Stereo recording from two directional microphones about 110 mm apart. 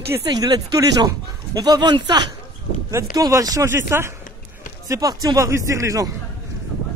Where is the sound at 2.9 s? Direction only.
30° right (ahead or behind).